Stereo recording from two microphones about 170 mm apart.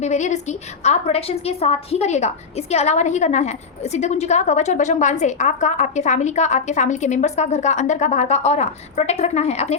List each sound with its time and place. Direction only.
0.0 s a woman's voice: 45° left (ahead or behind)